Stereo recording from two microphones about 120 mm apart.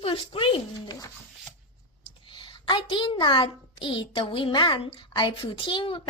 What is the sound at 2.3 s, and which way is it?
A child's voice, 45° left (ahead or behind).